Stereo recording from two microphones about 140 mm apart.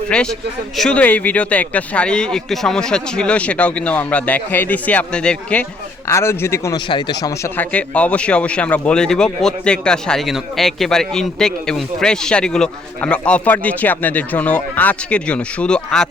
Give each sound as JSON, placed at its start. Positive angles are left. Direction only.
{"t": 0.1, "sound": "speech", "side_deg": 5}
{"t": 6.1, "sound": "speech", "side_deg": 20}
{"t": 6.7, "sound": "speech", "side_deg": 35}
{"t": 7.5, "sound": "speech", "side_deg": 10}